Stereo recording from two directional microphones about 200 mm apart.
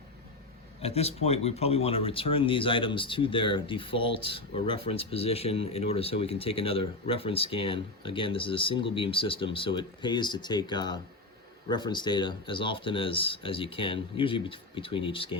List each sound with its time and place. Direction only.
0.8 s speech: 30° left (ahead or behind)